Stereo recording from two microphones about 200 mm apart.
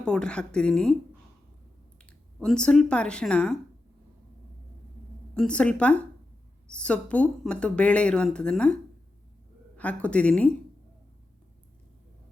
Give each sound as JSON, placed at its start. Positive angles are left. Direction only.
{"t": 0.0, "sound": "speech", "side_deg": 5}
{"t": 2.0, "sound": "speech", "side_deg": 5}
{"t": 5.3, "sound": "speech", "side_deg": 5}
{"t": 9.7, "sound": "speech", "side_deg": 5}